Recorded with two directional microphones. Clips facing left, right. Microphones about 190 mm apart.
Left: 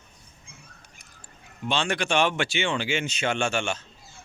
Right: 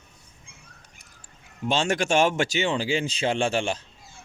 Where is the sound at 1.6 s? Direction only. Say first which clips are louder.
Right 3 dB; 40° right (ahead or behind).